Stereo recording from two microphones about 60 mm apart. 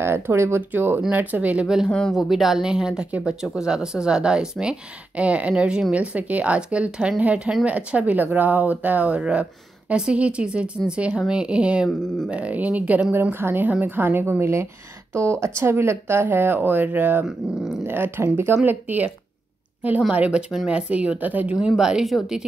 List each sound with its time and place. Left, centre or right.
0.0 s speech: right
1.9 s speech: centre
2.1 s speech: centre; by 13.0 s right
13.1 s speech: right
14.4 s speech: right
18.7 s speech: right
20.0 s speech: centre
21.5 s speech: centre